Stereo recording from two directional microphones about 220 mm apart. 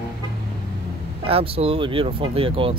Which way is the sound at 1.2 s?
25° right (ahead or behind).